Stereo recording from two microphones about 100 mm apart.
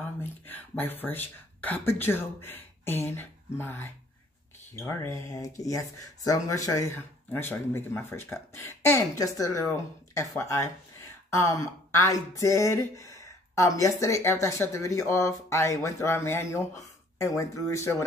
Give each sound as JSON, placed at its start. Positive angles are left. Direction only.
{"t": 0.2, "sound": "speech", "side_deg": 20}
{"t": 7.2, "sound": "speech", "side_deg": 20}